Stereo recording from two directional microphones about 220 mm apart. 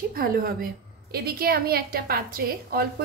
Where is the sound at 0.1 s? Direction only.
40° right (ahead or behind).